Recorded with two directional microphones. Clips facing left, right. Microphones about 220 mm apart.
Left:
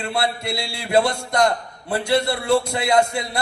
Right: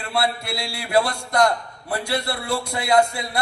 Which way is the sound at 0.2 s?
25° left (ahead or behind).